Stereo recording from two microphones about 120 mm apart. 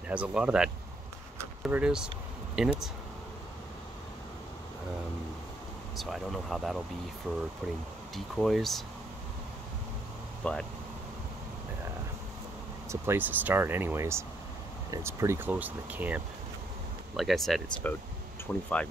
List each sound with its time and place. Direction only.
0.1 s speech: 10° right (ahead or behind)
5.9 s speech: centre (ahead or behind)
10.4 s speech: 5° left (ahead or behind)
12.9 s speech: 20° right (ahead or behind)
17.2 s speech: centre (ahead or behind)
17.8 s speech: 15° left (ahead or behind)